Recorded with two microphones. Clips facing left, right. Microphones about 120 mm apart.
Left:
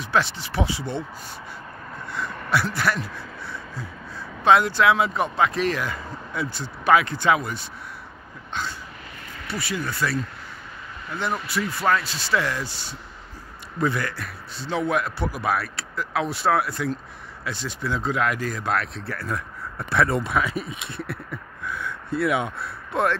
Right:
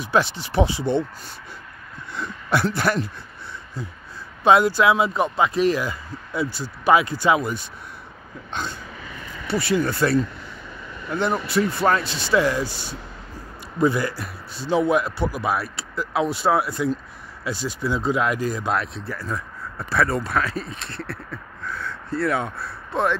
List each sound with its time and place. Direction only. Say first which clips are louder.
0.0 s speech: right 2 dB; 15° right (ahead or behind)
2.5 s speech: right 3 dB; 25° right (ahead or behind)
4.5 s speech: right 2 dB; 10° right (ahead or behind)
9.6 s speech: right 6 dB; 30° right (ahead or behind)
11.1 s speech: right 5 dB; 25° right (ahead or behind)
13.7 s a man's voice: right 4 dB; 10° right (ahead or behind)
20.1 s speech: even; 20° left (ahead or behind)